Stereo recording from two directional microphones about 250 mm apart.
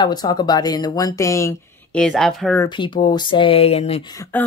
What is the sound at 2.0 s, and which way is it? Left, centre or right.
Speech, centre.